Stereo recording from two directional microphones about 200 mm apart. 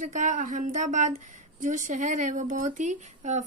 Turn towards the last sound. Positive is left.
turn(degrees=-35)  # may be behind; listen again after turning